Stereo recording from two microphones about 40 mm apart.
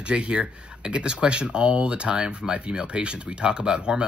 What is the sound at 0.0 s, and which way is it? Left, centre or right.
Speech, right.